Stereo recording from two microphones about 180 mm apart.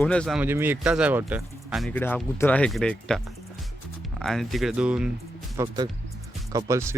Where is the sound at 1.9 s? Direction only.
10° left (ahead or behind).